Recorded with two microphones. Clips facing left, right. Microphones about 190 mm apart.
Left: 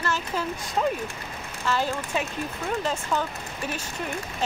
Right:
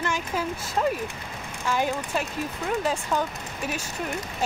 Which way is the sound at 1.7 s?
15° right (ahead or behind).